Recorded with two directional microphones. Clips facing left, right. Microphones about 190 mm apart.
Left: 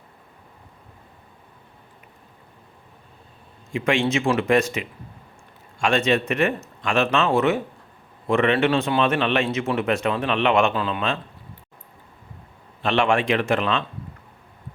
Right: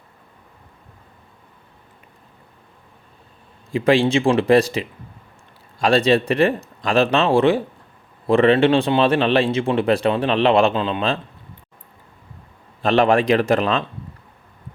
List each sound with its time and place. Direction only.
3.7 s speech: 35° right (ahead or behind)
12.8 s speech: 40° right (ahead or behind)